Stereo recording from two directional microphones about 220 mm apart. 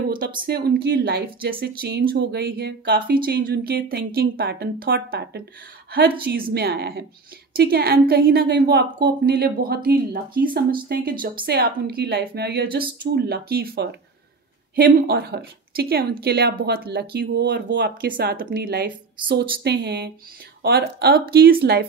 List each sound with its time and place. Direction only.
0.4 s a woman's voice: 45° right (ahead or behind)